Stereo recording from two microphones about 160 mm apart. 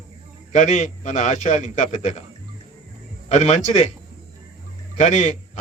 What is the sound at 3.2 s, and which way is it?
Speech, 45° left (ahead or behind).